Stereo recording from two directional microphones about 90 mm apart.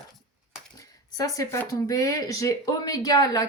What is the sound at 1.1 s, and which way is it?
A woman's voice, 40° left (ahead or behind).